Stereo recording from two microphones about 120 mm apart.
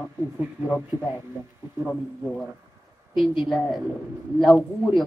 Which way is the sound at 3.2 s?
Centre (ahead or behind).